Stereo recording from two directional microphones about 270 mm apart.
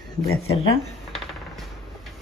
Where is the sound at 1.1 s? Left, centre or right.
Centre.